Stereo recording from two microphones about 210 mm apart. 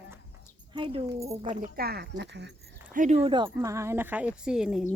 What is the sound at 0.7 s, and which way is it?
Speech, 25° right (ahead or behind).